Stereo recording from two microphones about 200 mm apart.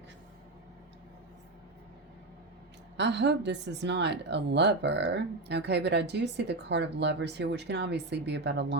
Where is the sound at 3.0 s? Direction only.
60° right (ahead or behind).